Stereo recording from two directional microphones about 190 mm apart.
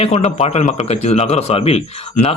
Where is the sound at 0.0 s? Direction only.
35° left (ahead or behind).